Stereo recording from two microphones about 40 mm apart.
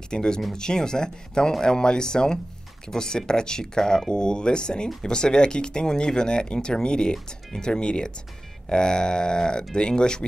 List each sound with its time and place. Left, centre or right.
0.1 s speech: centre